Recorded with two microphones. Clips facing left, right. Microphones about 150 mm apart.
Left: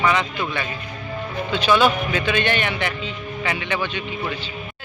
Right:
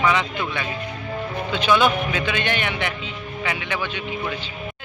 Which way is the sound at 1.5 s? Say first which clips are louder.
Left 1 dB; 15° right (ahead or behind).